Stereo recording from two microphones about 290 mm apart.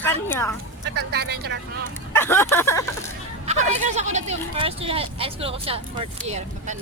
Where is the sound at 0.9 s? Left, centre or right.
Right.